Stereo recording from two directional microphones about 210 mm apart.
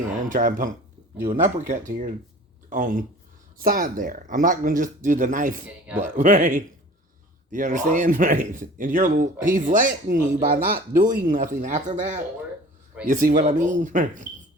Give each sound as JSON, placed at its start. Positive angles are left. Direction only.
{"t": 0.3, "sound": "speech", "side_deg": -40}